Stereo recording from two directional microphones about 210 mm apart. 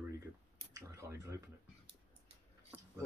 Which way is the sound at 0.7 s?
15° right (ahead or behind).